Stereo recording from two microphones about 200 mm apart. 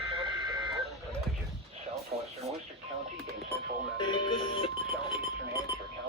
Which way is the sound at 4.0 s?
25° left (ahead or behind).